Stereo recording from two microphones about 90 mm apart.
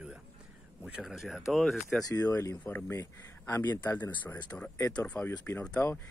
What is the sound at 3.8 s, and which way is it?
Speech, 20° left (ahead or behind).